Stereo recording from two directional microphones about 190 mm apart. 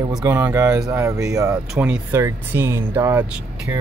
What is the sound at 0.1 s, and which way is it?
Speech, 15° right (ahead or behind).